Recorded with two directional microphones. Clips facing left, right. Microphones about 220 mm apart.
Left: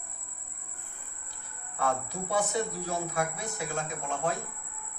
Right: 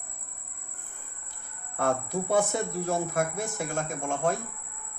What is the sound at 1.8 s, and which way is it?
A man's voice, 50° right (ahead or behind).